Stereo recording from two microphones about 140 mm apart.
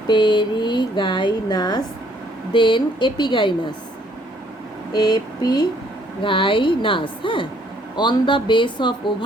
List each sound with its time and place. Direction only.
0.1 s speech: 35° left (ahead or behind)
4.9 s a sound: 30° left (ahead or behind)
6.2 s speech: 40° left (ahead or behind)